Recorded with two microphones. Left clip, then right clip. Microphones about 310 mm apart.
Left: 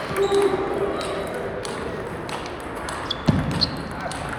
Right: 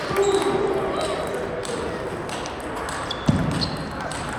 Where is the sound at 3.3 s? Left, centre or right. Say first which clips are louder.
Left 2 dB; left.